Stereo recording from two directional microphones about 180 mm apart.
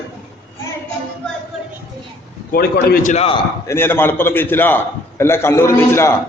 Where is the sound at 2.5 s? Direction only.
55° left (ahead or behind); by 3.3 s 40° left (ahead or behind).